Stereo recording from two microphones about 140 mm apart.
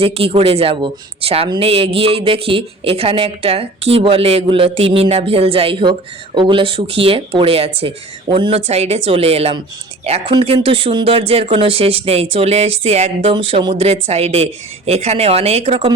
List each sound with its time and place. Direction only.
0.0 s speech: 45° right (ahead or behind)
13.3 s speech: 35° right (ahead or behind)
13.8 s speech: 50° right (ahead or behind)